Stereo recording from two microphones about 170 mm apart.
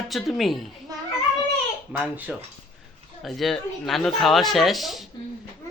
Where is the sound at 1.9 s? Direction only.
10° right (ahead or behind).